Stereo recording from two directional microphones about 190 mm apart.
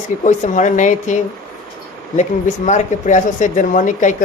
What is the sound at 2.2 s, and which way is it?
Speech, 40° left (ahead or behind).